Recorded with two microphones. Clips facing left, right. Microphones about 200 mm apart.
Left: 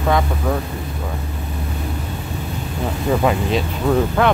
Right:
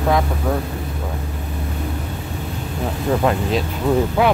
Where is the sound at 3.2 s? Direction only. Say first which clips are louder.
Even; 5° left (ahead or behind).